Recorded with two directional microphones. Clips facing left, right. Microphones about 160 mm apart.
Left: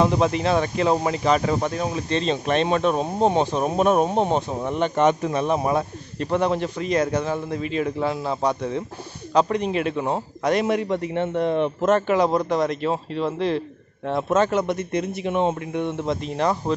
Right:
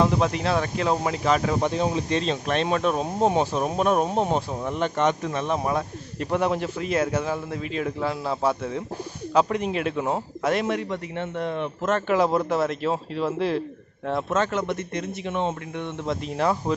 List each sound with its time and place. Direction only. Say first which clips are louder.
0.0 s a man's voice: left 2 dB; centre (ahead or behind)
1.6 s speech: right 1 dB; 20° right (ahead or behind)
2.2 s a man's voice: left 3 dB; centre (ahead or behind)
6.1 s a man's voice: left 2 dB; 10° right (ahead or behind)
10.7 s a man's voice: left 5 dB; 20° left (ahead or behind)
12.1 s a man's voice: left 2 dB; 5° right (ahead or behind)
14.3 s speech: left 6 dB; 15° left (ahead or behind)
16.1 s a man's voice: right 1 dB; 5° right (ahead or behind)